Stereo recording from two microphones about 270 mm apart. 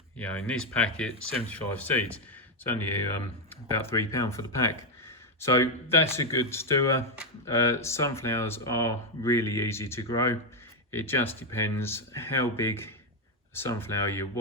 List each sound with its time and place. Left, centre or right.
0.2 s speech: centre